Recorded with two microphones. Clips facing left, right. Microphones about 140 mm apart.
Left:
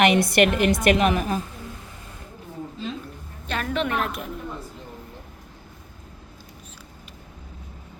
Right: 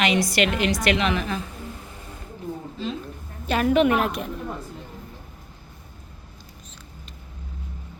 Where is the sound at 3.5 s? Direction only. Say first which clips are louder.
Right 7 dB; 10° right (ahead or behind).